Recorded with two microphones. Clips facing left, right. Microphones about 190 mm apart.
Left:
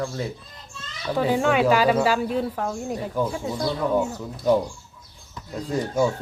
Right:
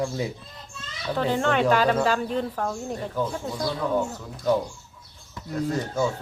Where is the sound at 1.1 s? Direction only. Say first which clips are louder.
Left 3 dB; 10° left (ahead or behind).